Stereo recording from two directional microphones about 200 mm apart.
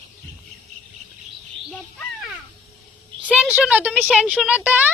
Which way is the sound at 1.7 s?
5° left (ahead or behind).